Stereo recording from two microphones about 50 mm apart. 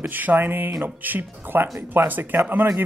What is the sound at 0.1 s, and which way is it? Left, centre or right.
Speech, right.